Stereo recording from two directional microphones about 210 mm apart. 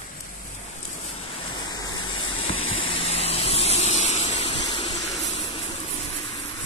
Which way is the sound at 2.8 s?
25° left (ahead or behind).